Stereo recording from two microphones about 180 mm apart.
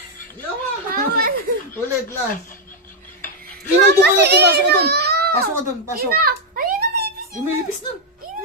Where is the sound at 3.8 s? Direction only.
70° right (ahead or behind).